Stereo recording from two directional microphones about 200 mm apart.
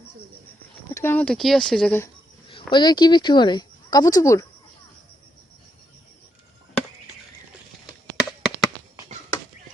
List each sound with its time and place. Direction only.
0.9 s speech: 10° left (ahead or behind)
2.5 s speech: 25° left (ahead or behind)
8.1 s a sound: 5° right (ahead or behind)